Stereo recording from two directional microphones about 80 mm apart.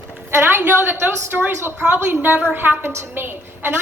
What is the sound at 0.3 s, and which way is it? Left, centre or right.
A woman's voice, right.